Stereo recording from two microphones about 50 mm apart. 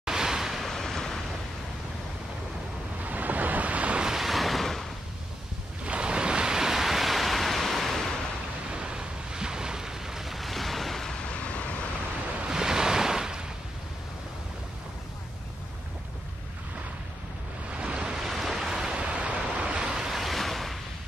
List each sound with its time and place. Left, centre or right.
0.0 s a sound: centre
0.7 s a sound: centre
3.0 s waves: right
4.0 s waves: centre
5.9 s waves: centre
8.6 s waves: centre
11.2 s vehicle: left
12.4 s waves: centre
17.7 s waves: right
18.2 s waves: centre
18.9 s waves: right
20.1 s waves: centre